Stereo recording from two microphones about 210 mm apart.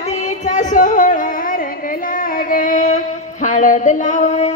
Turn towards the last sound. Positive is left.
turn(degrees=30)  # may be behind; listen again after turning